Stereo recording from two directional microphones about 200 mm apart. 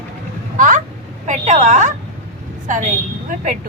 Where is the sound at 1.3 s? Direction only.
35° right (ahead or behind).